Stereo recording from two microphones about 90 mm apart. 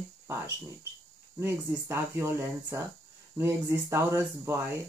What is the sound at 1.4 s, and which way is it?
Speech, 30° right (ahead or behind).